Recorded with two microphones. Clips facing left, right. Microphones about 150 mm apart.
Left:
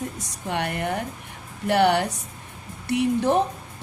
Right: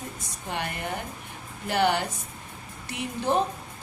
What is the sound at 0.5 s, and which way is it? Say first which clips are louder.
A woman's voice: left 6 dB; 65° left (ahead or behind).